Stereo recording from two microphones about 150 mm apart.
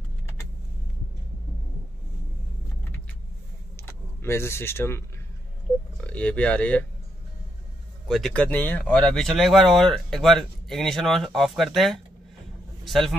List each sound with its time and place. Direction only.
3.8 s speech: 15° left (ahead or behind)
8.1 s a man's voice: 5° left (ahead or behind)